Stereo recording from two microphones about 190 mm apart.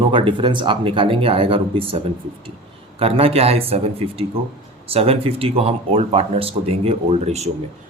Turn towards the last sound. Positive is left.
turn(degrees=-35)  # may be behind; listen again after turning